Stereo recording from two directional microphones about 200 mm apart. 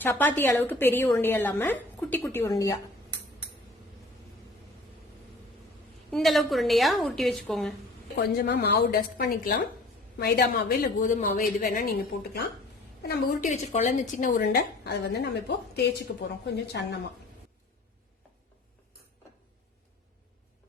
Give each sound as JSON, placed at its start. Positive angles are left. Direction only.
{"t": 0.0, "sound": "a woman's voice", "side_deg": 10}
{"t": 6.1, "sound": "a woman's voice", "side_deg": 0}
{"t": 8.4, "sound": "a woman's voice", "side_deg": 50}
{"t": 13.5, "sound": "a woman's voice", "side_deg": 35}
{"t": 14.4, "sound": "a woman's voice", "side_deg": 55}